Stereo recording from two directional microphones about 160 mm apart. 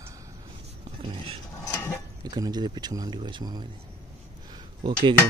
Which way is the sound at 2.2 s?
25° right (ahead or behind).